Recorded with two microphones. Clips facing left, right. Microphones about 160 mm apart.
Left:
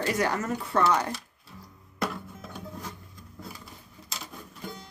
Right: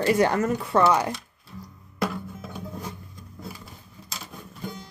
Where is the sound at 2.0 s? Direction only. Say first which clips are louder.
Right 4 dB; 5° right (ahead or behind).